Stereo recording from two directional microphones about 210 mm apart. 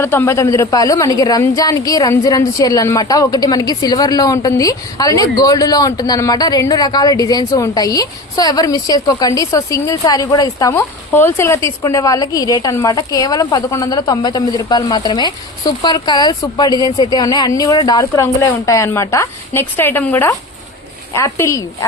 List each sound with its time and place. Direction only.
0.0 s a man's voice: 10° left (ahead or behind)